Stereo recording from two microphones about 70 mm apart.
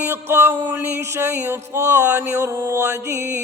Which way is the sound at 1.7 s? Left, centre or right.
Right.